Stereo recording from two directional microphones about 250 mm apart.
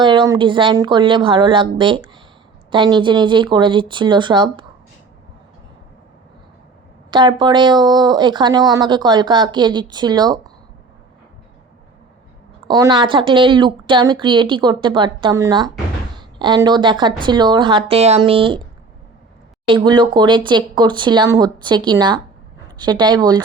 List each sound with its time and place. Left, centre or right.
0.0 s a woman's voice: centre
7.1 s speech: centre
12.6 s a woman's voice: centre
19.6 s speech: centre